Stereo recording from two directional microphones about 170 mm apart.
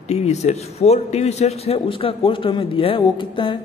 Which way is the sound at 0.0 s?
40° left (ahead or behind).